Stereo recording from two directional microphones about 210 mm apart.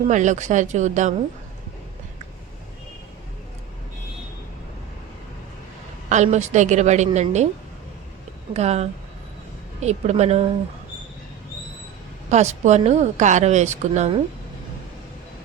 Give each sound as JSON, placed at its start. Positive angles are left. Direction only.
{"t": 0.1, "sound": "a woman's voice", "side_deg": -35}
{"t": 6.1, "sound": "a woman's voice", "side_deg": -35}
{"t": 8.5, "sound": "a woman's voice", "side_deg": -30}
{"t": 12.3, "sound": "a woman's voice", "side_deg": -35}